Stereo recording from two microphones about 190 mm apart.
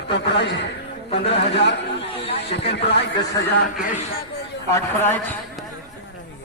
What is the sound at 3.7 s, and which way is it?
Speech, 45° left (ahead or behind).